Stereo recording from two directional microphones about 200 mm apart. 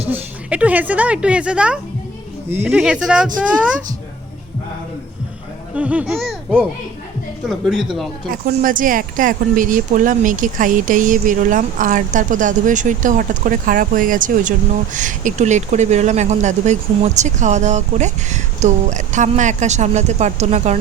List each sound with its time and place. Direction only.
0.1 s speech: 5° right (ahead or behind)
5.7 s speech: 5° right (ahead or behind)
8.5 s speech: 40° right (ahead or behind)